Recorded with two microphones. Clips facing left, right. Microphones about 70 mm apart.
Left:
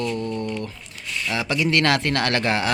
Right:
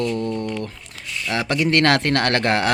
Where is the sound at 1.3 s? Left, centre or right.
Right.